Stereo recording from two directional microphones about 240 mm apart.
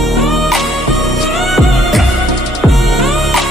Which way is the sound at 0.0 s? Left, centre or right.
Centre.